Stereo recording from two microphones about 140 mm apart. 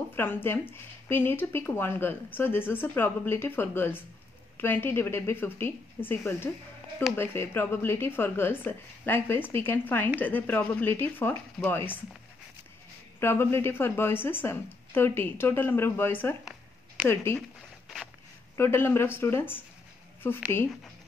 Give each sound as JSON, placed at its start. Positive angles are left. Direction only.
{"t": 0.1, "sound": "speech", "side_deg": 15}
{"t": 13.2, "sound": "speech", "side_deg": 15}
{"t": 18.6, "sound": "speech", "side_deg": 15}